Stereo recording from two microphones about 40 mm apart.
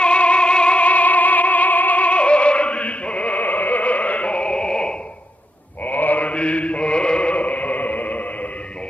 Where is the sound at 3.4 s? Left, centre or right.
Left.